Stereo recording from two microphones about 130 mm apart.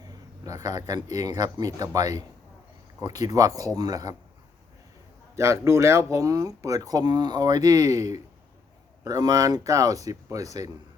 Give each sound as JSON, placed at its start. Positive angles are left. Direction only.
{"t": 0.0, "sound": "speech", "side_deg": -30}
{"t": 5.4, "sound": "speech", "side_deg": -20}